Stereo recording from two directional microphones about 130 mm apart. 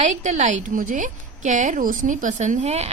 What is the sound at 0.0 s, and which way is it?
A woman's voice, 70° right (ahead or behind).